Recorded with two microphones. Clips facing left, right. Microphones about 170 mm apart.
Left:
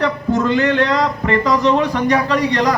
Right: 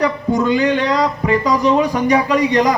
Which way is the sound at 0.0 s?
15° right (ahead or behind).